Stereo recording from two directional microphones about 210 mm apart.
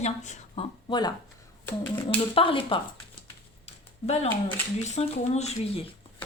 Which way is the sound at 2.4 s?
25° left (ahead or behind).